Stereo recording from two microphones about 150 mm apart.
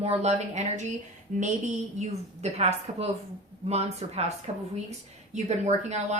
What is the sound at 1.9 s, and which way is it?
Speech, 45° right (ahead or behind).